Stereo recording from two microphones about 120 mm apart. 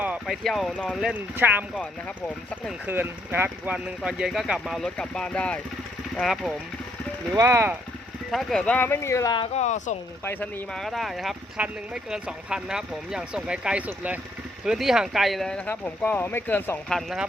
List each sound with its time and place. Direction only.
0.3 s speech: centre (ahead or behind)
1.1 s speech: 15° right (ahead or behind)
1.7 s speech: 10° left (ahead or behind)
2.8 s speech: 15° right (ahead or behind)
4.0 s speech: 5° right (ahead or behind)
7.3 s speech: 25° right (ahead or behind)
8.3 s speech: centre (ahead or behind)
8.9 s speech: 25° left (ahead or behind)
9.6 s speech: 85° left
10.8 s speech: centre (ahead or behind)
15.7 s speech: 20° left (ahead or behind)
16.9 s speech: centre (ahead or behind)